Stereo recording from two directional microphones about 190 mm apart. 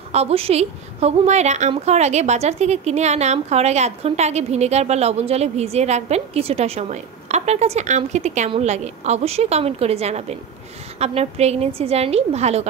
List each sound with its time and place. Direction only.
0.1 s a woman's voice: 30° right (ahead or behind)